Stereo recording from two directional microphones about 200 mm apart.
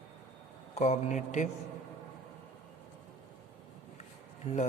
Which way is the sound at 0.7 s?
35° left (ahead or behind).